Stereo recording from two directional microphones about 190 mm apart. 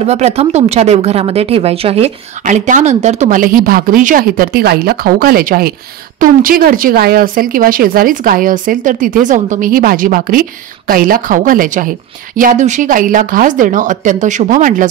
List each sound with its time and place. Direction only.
0.0 s a woman's voice: 35° right (ahead or behind)